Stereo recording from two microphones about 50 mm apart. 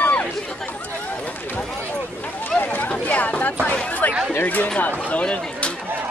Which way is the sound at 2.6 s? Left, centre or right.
Left.